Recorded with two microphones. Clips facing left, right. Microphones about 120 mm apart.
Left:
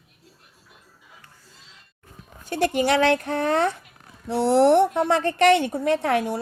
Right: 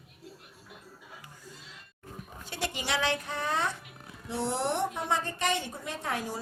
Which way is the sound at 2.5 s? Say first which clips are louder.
Left 13 dB; 55° left (ahead or behind).